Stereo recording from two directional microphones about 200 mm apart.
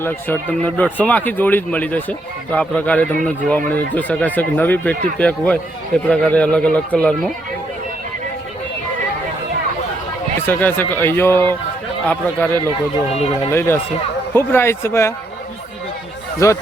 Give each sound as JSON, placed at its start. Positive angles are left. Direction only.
{"t": 0.0, "sound": "speech", "side_deg": 10}
{"t": 10.4, "sound": "speech", "side_deg": 10}
{"t": 13.5, "sound": "speech", "side_deg": 10}
{"t": 16.4, "sound": "speech", "side_deg": 15}